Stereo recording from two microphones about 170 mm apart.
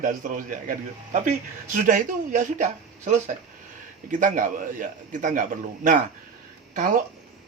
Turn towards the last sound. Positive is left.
turn(degrees=-50)  # may be behind; listen again after turning